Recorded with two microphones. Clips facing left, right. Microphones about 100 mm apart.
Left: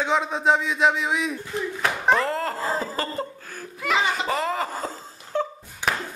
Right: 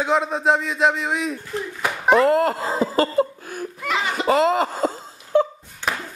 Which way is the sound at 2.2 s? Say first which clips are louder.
Right 9 dB; 60° right (ahead or behind).